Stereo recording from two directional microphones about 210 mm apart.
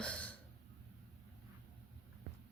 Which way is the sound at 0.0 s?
5° left (ahead or behind).